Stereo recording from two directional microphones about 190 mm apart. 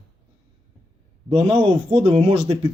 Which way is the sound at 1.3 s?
30° right (ahead or behind).